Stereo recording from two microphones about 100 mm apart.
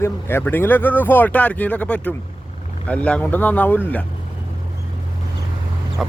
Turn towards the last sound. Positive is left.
turn(degrees=-5)  # may be behind; listen again after turning